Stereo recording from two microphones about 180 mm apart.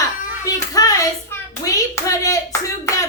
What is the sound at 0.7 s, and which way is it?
Hands, 20° left (ahead or behind).